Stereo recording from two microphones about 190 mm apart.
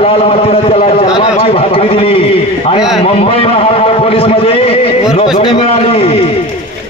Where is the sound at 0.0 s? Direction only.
30° left (ahead or behind).